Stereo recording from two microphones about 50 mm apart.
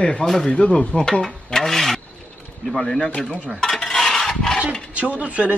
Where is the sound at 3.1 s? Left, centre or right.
Left.